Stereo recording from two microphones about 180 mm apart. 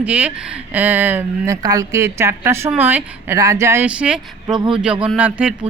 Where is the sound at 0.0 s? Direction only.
10° right (ahead or behind).